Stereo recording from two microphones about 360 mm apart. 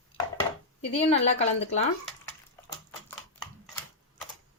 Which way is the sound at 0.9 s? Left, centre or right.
Centre.